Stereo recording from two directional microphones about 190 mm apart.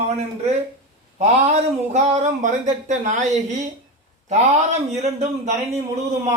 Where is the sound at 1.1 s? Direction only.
35° right (ahead or behind).